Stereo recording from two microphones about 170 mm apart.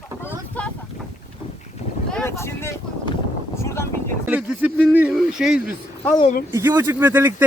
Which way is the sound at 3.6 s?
15° left (ahead or behind).